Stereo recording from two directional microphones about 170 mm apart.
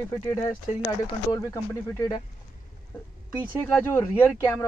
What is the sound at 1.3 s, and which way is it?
Speech, 15° left (ahead or behind).